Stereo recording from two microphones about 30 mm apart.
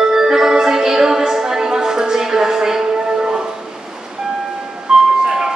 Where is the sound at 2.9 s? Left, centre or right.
Right.